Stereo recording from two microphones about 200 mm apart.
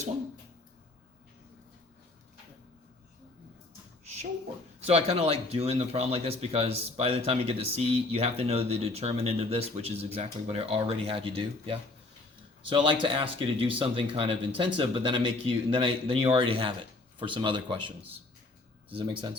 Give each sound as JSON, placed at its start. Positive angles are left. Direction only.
{"t": 4.9, "sound": "speech", "side_deg": -30}